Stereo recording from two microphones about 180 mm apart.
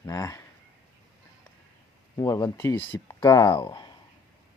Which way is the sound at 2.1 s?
20° left (ahead or behind).